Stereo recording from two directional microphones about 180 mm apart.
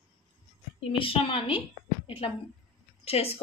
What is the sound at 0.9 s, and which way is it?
A woman's voice, 30° left (ahead or behind).